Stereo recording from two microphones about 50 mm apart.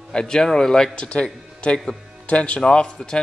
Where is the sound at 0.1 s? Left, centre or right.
Centre.